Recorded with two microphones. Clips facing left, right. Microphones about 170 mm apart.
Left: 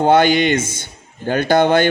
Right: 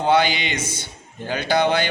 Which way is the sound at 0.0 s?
50° left (ahead or behind).